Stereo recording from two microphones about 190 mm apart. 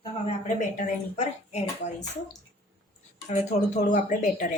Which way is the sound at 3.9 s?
45° left (ahead or behind).